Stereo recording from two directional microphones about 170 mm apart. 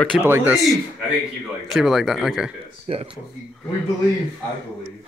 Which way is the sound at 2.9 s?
35° right (ahead or behind).